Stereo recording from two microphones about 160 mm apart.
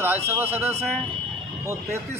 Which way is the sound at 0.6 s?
40° right (ahead or behind).